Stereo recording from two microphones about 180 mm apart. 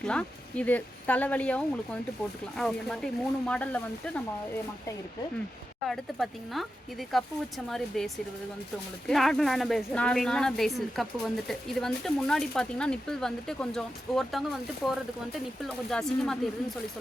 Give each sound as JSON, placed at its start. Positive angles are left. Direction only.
{"t": 0.0, "sound": "speech", "side_deg": 5}
{"t": 5.8, "sound": "speech", "side_deg": 0}